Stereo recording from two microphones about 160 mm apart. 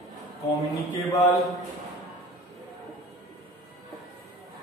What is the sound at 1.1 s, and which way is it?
Speech, 20° left (ahead or behind).